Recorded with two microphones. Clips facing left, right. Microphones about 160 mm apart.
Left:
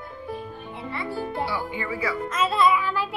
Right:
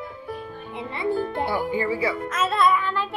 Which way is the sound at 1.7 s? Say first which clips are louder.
Right 5 dB; 30° right (ahead or behind).